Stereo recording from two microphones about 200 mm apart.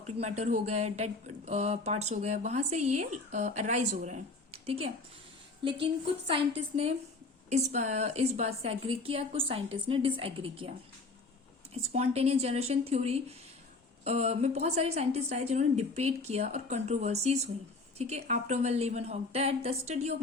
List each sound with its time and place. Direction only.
0.2 s a woman's voice: 35° right (ahead or behind)